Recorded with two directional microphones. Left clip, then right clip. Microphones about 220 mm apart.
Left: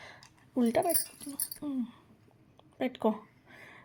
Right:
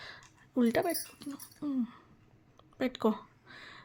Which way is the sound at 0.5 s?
20° right (ahead or behind).